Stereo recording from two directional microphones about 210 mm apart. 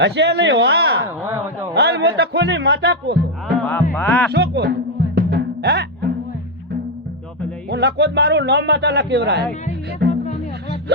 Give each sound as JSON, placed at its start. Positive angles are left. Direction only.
{"t": 0.0, "sound": "a man's voice", "side_deg": -55}
{"t": 1.0, "sound": "speech", "side_deg": -10}
{"t": 1.7, "sound": "speech", "side_deg": -50}
{"t": 3.6, "sound": "music", "side_deg": 10}
{"t": 3.9, "sound": "speech", "side_deg": 10}
{"t": 4.3, "sound": "speech", "side_deg": -55}
{"t": 5.1, "sound": "music", "side_deg": -50}
{"t": 7.7, "sound": "a man's voice", "side_deg": -55}
{"t": 9.6, "sound": "music", "side_deg": 35}